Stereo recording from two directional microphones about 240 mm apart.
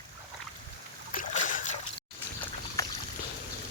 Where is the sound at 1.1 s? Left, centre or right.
Left.